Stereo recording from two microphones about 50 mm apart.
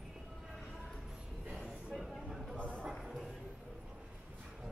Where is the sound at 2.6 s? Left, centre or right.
Left.